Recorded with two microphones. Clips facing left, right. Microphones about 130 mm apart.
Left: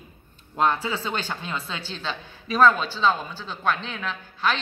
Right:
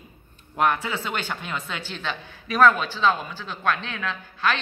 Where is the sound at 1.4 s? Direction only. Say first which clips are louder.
Even; 30° left (ahead or behind).